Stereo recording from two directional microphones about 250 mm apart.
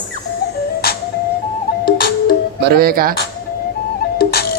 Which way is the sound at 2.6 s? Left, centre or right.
Right.